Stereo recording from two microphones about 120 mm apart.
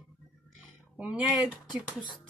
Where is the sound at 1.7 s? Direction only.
40° left (ahead or behind).